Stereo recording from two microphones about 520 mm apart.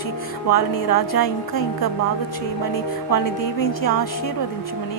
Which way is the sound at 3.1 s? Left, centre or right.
Left.